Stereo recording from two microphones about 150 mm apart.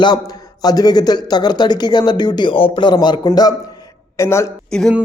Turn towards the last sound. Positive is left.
turn(degrees=5)  # may be behind; listen again after turning